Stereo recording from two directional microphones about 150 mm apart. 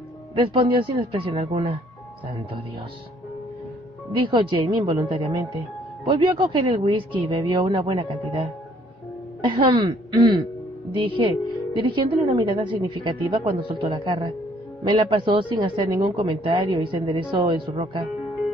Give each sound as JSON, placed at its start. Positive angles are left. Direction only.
{"t": 0.3, "sound": "a woman's voice", "side_deg": -35}
{"t": 4.1, "sound": "a woman's voice", "side_deg": -30}
{"t": 6.0, "sound": "a woman's voice", "side_deg": -30}
{"t": 9.4, "sound": "a woman's voice", "side_deg": -30}